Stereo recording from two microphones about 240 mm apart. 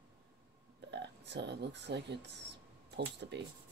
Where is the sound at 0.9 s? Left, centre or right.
Right.